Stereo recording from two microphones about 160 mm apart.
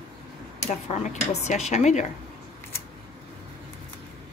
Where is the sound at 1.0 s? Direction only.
45° left (ahead or behind).